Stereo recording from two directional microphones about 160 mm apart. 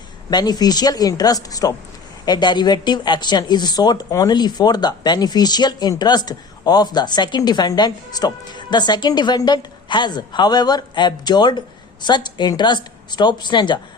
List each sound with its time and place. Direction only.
0.3 s speech: 25° left (ahead or behind)